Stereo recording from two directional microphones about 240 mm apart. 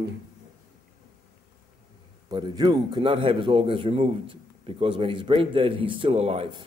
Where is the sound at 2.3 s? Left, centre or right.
Centre.